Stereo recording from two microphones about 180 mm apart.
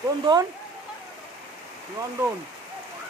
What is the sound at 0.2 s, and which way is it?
Speech, 25° right (ahead or behind).